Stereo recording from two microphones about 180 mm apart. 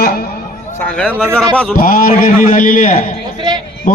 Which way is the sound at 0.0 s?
60° left (ahead or behind).